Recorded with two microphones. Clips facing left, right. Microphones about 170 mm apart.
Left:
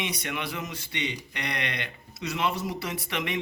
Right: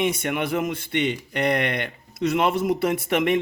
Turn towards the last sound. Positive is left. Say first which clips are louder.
# right 11 dB
turn(degrees=-50)  # may be behind; listen again after turning